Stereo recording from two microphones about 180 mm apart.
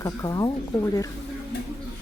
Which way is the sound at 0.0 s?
20° left (ahead or behind).